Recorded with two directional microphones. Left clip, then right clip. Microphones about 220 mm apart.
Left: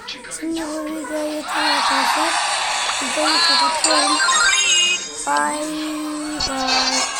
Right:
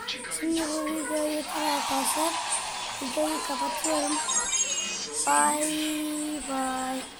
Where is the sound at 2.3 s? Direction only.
60° left (ahead or behind).